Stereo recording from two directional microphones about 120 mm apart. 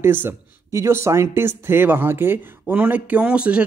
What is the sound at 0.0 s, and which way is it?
Speech, 20° right (ahead or behind).